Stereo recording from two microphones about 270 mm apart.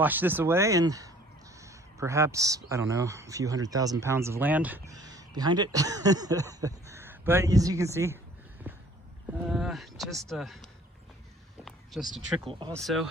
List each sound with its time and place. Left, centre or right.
0.0 s speech: centre
8.7 s horse: centre
9.4 s speech: centre
11.6 s a sound: centre
12.5 s speech: centre
12.7 s speech: centre